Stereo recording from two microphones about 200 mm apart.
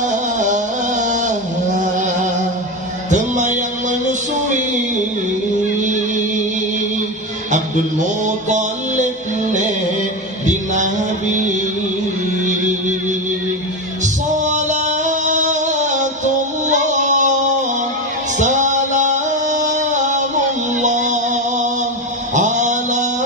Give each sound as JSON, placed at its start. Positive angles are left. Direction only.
{"t": 0.0, "sound": "music", "side_deg": -40}
{"t": 3.1, "sound": "speech", "side_deg": -35}
{"t": 8.3, "sound": "mantra", "side_deg": -40}
{"t": 10.4, "sound": "music", "side_deg": -40}
{"t": 14.0, "sound": "a sound", "side_deg": -35}
{"t": 16.6, "sound": "music", "side_deg": -35}
{"t": 18.4, "sound": "music", "side_deg": -40}
{"t": 22.3, "sound": "a sound", "side_deg": -40}